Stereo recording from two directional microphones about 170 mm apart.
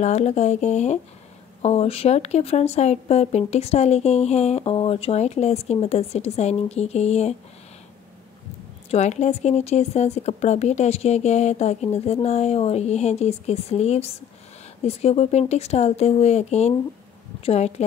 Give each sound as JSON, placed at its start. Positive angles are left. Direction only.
{"t": 0.0, "sound": "speech", "side_deg": 40}
{"t": 8.9, "sound": "speech", "side_deg": 40}